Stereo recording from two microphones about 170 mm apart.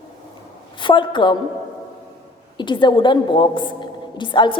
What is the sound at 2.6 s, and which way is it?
A woman's voice, 25° left (ahead or behind).